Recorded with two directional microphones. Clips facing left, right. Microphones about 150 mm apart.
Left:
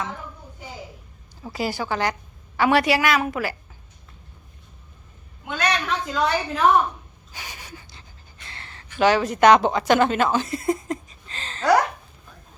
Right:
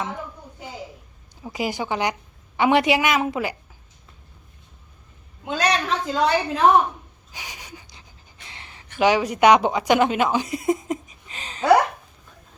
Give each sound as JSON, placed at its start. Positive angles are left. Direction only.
{"t": 1.4, "sound": "a woman's voice", "side_deg": -15}
{"t": 5.5, "sound": "a woman's voice", "side_deg": -35}
{"t": 7.3, "sound": "wheeze", "side_deg": -15}
{"t": 8.4, "sound": "speech", "side_deg": -15}